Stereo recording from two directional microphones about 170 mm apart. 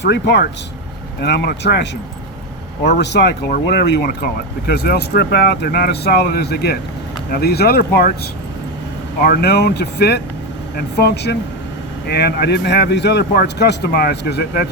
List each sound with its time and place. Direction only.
0.0 s speech: 85° left
1.2 s speech: 75° left (ahead or behind)
3.5 s speech: 75° left (ahead or behind)
9.2 s speech: 70° left (ahead or behind)